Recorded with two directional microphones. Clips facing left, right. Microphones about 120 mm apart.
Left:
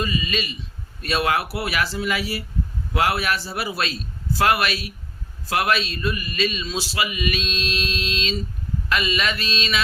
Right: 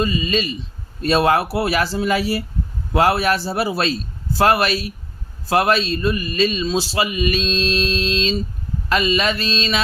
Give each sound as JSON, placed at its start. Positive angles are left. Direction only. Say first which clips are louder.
{"t": 0.0, "sound": "a man's voice", "louder": "right 5 dB", "side_deg": -35}